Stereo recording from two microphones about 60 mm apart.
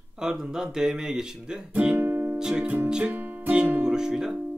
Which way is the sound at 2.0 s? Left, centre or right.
Right.